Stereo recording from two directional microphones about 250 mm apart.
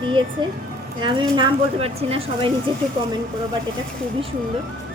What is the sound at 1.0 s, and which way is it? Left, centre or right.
A woman's voice, centre.